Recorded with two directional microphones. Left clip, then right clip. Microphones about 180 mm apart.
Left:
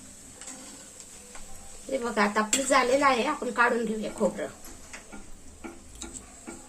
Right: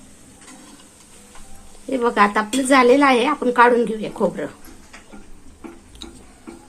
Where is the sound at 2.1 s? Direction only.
55° right (ahead or behind).